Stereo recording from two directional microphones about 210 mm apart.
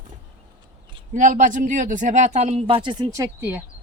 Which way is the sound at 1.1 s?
40° right (ahead or behind).